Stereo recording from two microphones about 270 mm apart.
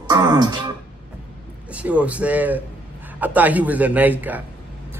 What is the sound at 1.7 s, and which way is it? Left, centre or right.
A man's voice, centre.